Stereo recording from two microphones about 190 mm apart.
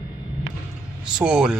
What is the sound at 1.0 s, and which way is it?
Speech, 5° right (ahead or behind).